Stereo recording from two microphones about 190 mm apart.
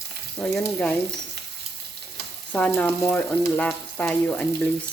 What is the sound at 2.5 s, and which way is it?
Speech, 10° left (ahead or behind).